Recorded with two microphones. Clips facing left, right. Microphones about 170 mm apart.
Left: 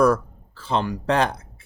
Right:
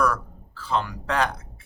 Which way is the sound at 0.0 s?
25° left (ahead or behind).